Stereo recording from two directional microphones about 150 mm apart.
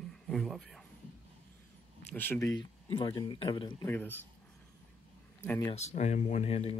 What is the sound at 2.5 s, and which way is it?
Speech, 35° left (ahead or behind).